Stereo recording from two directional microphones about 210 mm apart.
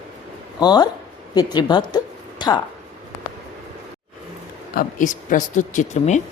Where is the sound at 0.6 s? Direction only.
20° left (ahead or behind).